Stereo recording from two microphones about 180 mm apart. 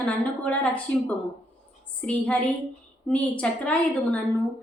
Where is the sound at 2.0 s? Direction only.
5° left (ahead or behind).